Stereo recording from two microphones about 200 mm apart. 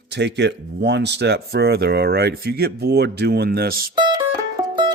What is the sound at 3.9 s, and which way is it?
Music, 20° right (ahead or behind).